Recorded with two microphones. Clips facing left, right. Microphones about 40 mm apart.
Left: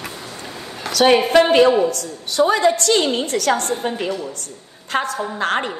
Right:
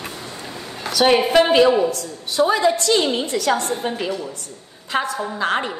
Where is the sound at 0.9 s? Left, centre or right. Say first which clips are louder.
Left 2 dB; left.